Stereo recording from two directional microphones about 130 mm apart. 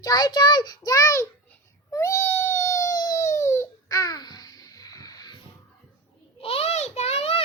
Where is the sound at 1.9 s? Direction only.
25° left (ahead or behind).